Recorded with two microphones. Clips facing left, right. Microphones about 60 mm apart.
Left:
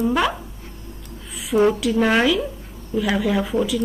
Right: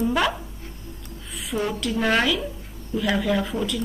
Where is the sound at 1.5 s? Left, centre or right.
Left.